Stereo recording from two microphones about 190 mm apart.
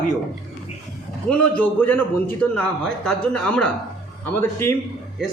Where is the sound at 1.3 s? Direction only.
10° left (ahead or behind).